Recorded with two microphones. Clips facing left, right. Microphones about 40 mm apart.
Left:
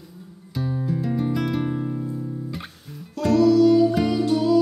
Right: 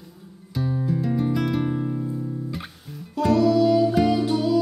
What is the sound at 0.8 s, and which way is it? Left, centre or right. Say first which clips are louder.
Music: right 1 dB; centre.